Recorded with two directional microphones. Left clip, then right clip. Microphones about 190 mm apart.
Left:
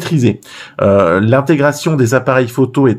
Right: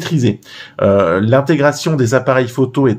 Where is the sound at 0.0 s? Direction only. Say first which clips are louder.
Left 2 dB; 15° left (ahead or behind).